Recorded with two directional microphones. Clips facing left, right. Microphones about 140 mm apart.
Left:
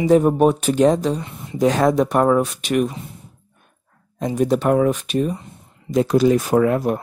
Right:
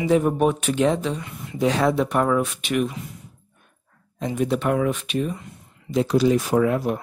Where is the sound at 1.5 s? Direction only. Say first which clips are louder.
Left 4 dB; 45° left (ahead or behind).